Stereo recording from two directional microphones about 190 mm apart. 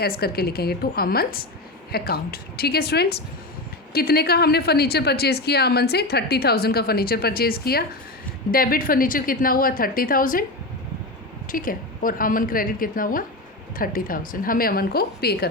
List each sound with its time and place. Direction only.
0.0 s a woman's voice: 55° left (ahead or behind)
11.4 s a woman's voice: 45° left (ahead or behind)